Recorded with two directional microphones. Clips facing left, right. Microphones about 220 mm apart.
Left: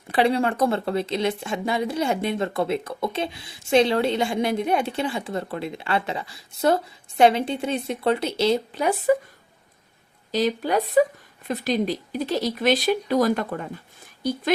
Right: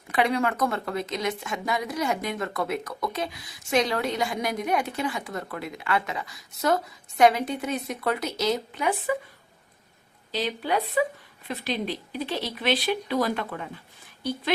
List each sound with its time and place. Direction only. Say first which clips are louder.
0.1 s speech: left 4 dB; 30° left (ahead or behind)
10.3 s speech: left 5 dB; 45° left (ahead or behind)